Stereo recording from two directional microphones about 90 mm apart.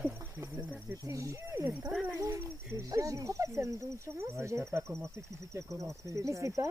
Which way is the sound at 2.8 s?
40° right (ahead or behind).